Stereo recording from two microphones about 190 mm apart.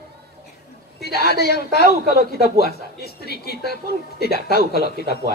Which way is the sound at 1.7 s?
55° right (ahead or behind).